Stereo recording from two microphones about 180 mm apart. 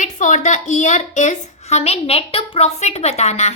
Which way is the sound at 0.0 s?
45° left (ahead or behind).